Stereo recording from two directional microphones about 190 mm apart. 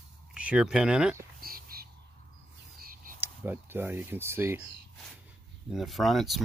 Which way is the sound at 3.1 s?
10° right (ahead or behind).